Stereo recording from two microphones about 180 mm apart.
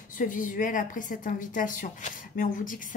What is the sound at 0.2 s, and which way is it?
A woman's voice, 50° left (ahead or behind).